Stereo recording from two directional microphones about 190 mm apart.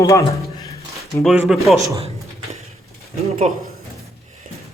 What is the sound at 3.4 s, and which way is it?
Speech, 35° right (ahead or behind).